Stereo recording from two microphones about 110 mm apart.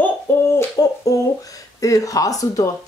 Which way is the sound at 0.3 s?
20° left (ahead or behind).